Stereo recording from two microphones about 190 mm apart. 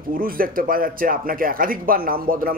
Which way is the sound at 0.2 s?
50° right (ahead or behind).